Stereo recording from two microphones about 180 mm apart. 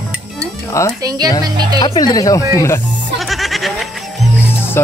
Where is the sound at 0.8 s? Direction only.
15° left (ahead or behind).